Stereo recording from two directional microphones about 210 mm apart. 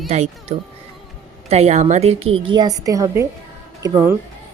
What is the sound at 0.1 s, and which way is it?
A woman's voice, 30° right (ahead or behind).